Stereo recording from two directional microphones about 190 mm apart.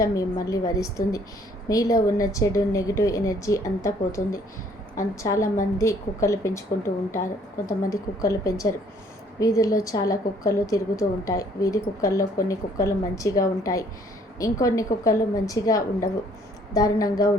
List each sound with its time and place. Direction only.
0.0 s a woman's voice: 15° left (ahead or behind)